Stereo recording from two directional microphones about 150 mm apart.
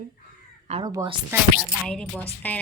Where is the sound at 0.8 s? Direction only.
30° right (ahead or behind).